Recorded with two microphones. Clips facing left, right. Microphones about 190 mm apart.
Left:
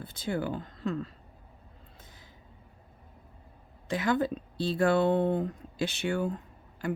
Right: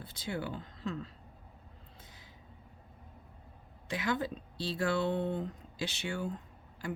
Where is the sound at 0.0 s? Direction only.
50° left (ahead or behind).